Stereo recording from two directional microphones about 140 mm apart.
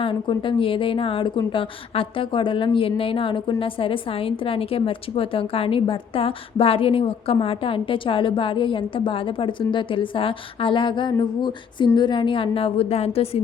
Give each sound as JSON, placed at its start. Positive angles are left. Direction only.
{"t": 0.0, "sound": "a woman's voice", "side_deg": 35}